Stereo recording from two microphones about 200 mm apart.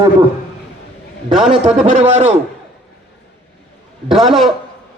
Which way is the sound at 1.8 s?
30° right (ahead or behind).